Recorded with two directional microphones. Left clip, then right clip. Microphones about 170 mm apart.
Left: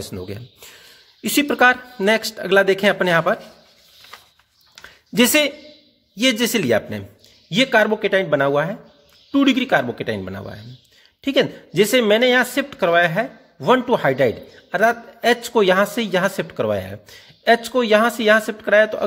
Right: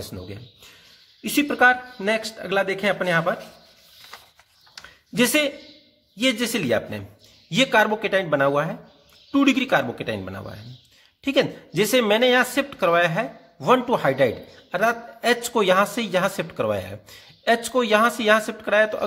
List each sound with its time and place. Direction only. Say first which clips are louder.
0.0 s speech: left 5 dB; 40° left (ahead or behind)
4.8 s a sound: left 4 dB; 35° left (ahead or behind)
6.1 s speech: left 4 dB; 35° left (ahead or behind); by 19.0 s 20° left (ahead or behind)